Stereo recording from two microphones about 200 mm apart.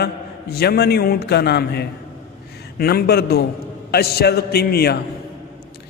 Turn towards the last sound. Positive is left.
turn(degrees=50)  # may be behind; listen again after turning